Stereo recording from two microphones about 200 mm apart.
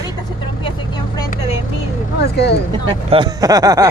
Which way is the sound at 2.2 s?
55° left (ahead or behind).